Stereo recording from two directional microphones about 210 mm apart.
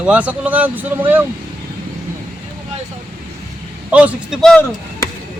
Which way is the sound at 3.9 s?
5° right (ahead or behind).